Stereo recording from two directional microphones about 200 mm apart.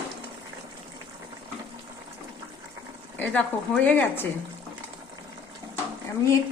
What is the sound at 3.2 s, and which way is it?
Speech, 5° left (ahead or behind).